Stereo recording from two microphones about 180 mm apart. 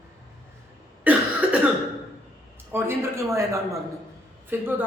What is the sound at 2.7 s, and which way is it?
A man's voice, 15° right (ahead or behind).